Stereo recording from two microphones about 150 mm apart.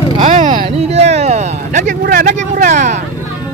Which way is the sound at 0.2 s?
55° right (ahead or behind).